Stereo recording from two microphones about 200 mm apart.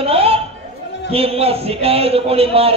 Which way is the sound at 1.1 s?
30° right (ahead or behind).